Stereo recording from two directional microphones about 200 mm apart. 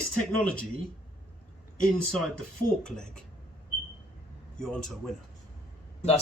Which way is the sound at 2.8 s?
5° left (ahead or behind).